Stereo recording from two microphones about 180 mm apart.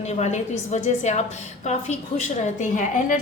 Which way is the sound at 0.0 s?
40° left (ahead or behind).